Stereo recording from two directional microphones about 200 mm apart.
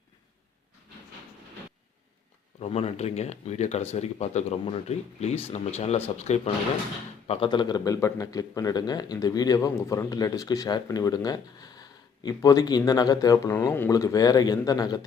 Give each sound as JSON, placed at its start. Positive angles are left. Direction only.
{"t": 2.6, "sound": "speech", "side_deg": 30}